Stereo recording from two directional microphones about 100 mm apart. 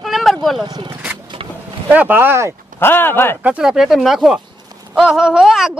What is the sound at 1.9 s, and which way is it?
Speech, 15° right (ahead or behind).